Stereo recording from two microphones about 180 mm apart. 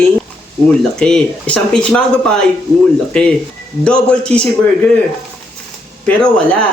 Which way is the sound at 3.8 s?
5° left (ahead or behind).